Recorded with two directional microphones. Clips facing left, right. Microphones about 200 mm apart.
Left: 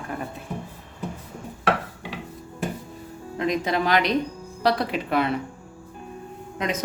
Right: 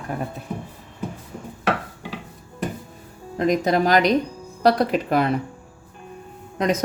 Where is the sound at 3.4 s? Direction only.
40° right (ahead or behind).